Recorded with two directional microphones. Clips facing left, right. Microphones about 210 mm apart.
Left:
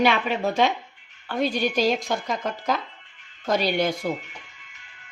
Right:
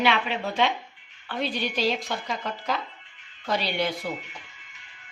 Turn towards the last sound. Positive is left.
turn(degrees=45)  # may be behind; listen again after turning